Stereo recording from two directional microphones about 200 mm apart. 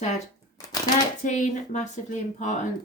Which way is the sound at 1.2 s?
40° left (ahead or behind).